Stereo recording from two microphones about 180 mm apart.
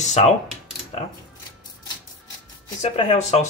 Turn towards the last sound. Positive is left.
turn(degrees=40)  # may be behind; listen again after turning